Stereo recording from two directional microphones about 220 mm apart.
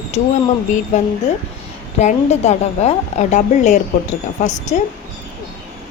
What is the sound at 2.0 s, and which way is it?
A woman's voice, 30° left (ahead or behind).